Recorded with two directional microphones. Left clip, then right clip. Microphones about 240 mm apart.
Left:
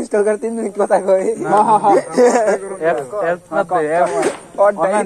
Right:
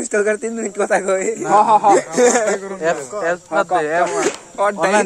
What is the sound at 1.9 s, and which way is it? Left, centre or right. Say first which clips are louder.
Speech: left 1 dB; centre.